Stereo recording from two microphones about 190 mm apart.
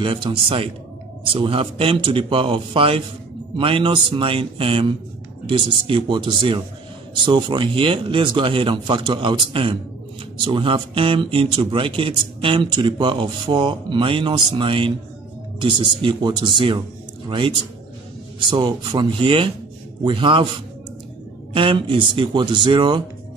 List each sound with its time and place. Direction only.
0.0 s speech: 25° right (ahead or behind)